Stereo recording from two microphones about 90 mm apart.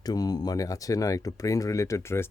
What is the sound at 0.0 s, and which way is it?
Speech, 45° left (ahead or behind).